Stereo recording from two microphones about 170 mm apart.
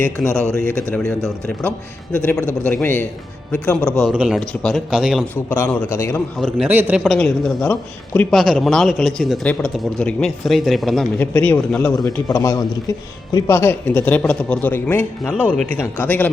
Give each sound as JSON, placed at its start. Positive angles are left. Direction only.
{"t": 0.3, "sound": "a man's voice", "side_deg": -15}
{"t": 0.9, "sound": "speech", "side_deg": 5}
{"t": 4.1, "sound": "a man's voice", "side_deg": -10}
{"t": 4.4, "sound": "speech", "side_deg": 0}
{"t": 5.5, "sound": "speech", "side_deg": 10}
{"t": 6.4, "sound": "speech", "side_deg": -10}
{"t": 7.2, "sound": "speech", "side_deg": 5}
{"t": 11.2, "sound": "speech", "side_deg": 10}
{"t": 11.9, "sound": "a man's voice", "side_deg": 20}